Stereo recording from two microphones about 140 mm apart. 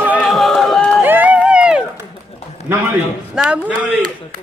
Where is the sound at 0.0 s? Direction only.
10° right (ahead or behind).